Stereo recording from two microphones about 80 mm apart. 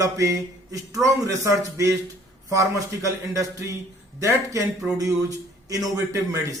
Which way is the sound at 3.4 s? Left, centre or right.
Right.